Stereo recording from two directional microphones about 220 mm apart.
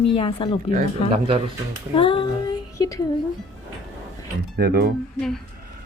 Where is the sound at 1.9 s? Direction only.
25° left (ahead or behind).